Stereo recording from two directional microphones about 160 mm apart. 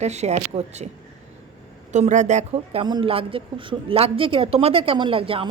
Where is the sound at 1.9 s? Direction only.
50° right (ahead or behind).